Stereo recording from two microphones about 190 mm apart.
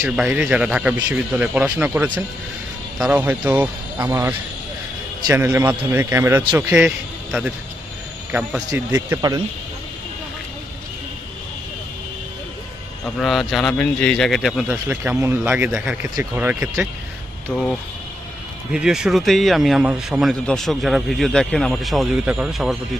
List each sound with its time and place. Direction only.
0.0 s speech: 5° right (ahead or behind)
13.2 s speech: centre (ahead or behind)
14.7 s speech: 10° right (ahead or behind)